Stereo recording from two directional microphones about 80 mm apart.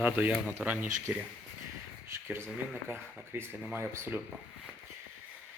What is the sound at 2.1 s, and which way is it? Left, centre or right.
Speech, right.